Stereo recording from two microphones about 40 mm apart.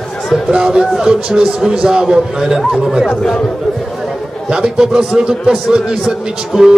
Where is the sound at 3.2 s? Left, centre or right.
Left.